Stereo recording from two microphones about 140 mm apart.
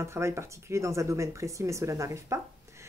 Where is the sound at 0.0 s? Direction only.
20° right (ahead or behind).